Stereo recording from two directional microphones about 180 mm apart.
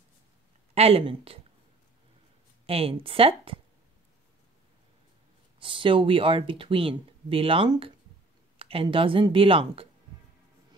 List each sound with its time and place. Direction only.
0.7 s speech: 35° right (ahead or behind)
2.6 s speech: 30° right (ahead or behind)
5.6 s speech: 30° right (ahead or behind)